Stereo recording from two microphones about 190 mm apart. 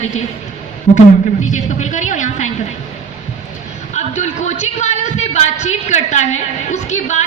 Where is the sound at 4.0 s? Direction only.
40° left (ahead or behind).